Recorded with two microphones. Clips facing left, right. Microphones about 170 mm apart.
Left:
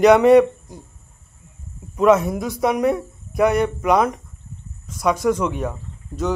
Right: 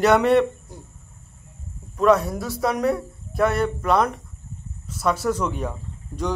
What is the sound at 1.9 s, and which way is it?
A man's voice, 20° left (ahead or behind).